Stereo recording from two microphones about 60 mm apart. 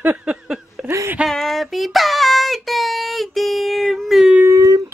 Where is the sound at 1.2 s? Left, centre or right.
Centre.